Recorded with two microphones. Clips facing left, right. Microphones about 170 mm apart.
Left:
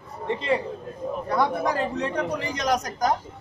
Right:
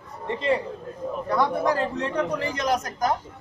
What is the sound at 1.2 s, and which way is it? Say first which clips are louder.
Speech: right 1 dB; 15° left (ahead or behind).